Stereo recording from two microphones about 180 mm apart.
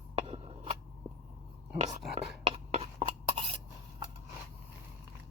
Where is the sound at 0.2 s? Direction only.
30° right (ahead or behind).